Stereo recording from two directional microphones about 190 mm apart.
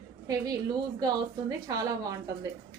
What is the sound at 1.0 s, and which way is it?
A woman's voice, 20° right (ahead or behind).